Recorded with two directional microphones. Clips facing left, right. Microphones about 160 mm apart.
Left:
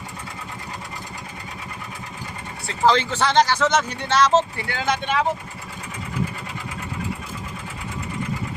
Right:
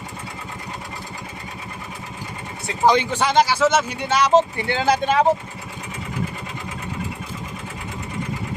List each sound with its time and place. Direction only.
2.6 s speech: 15° right (ahead or behind)
4.7 s speech: 30° right (ahead or behind)